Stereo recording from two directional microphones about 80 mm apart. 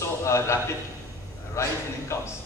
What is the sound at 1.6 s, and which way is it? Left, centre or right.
Speech, left.